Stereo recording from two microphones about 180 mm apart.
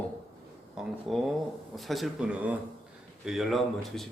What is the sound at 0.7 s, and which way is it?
Speech, centre (ahead or behind).